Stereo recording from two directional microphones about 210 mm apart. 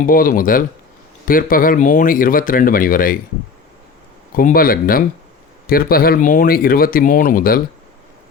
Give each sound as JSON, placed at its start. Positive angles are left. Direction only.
{"t": 0.0, "sound": "speech", "side_deg": 40}
{"t": 4.4, "sound": "speech", "side_deg": 45}